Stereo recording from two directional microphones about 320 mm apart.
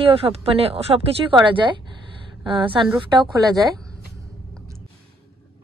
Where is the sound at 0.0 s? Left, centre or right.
Centre.